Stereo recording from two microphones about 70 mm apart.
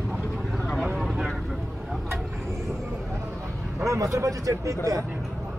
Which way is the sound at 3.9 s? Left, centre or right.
Right.